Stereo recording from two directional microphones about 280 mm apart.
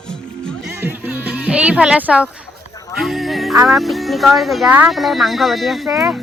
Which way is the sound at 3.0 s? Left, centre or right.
Centre.